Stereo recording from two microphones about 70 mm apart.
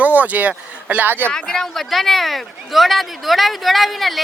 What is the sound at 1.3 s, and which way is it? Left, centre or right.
Speech, centre.